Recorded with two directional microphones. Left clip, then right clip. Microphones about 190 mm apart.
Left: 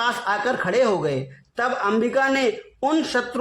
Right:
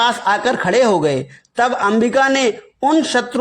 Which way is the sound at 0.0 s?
30° right (ahead or behind).